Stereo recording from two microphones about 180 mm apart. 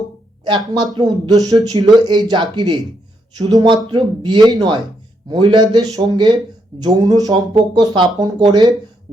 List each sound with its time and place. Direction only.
0.4 s speech: 25° right (ahead or behind)